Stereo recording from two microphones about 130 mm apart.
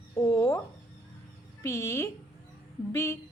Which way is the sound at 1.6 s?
20° left (ahead or behind).